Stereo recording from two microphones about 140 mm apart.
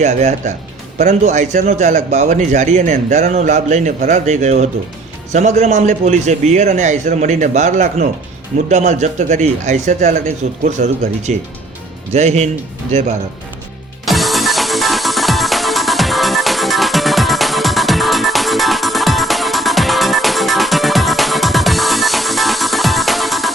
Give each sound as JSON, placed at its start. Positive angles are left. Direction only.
{"t": 0.0, "sound": "a man's voice", "side_deg": -55}
{"t": 14.0, "sound": "music", "side_deg": 0}